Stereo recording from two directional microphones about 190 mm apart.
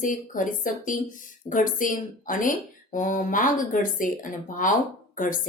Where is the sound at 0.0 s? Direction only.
45° left (ahead or behind).